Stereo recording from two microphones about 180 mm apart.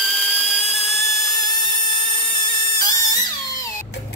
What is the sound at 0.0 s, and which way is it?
Dental drill, centre (ahead or behind).